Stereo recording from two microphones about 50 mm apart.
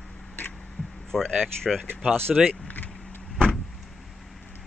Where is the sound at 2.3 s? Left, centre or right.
Centre.